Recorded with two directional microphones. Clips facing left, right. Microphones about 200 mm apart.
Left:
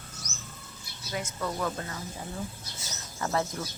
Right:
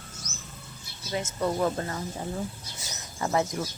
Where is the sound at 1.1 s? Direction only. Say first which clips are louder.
Right 5 dB; 25° right (ahead or behind).